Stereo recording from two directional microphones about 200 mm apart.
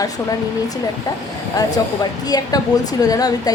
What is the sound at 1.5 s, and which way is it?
Speech, 20° left (ahead or behind).